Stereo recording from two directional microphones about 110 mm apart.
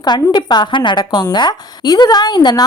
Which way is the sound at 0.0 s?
40° left (ahead or behind).